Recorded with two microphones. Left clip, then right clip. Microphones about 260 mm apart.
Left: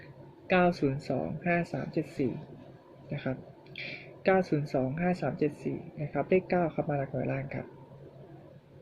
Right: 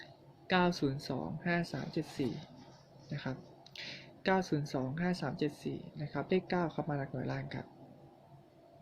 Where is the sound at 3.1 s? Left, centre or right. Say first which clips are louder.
Left 7 dB; centre.